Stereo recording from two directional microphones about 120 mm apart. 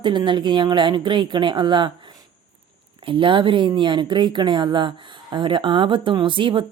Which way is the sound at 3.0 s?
45° right (ahead or behind).